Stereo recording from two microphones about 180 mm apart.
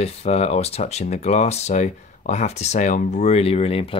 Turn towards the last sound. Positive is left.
turn(degrees=30)  # may be behind; listen again after turning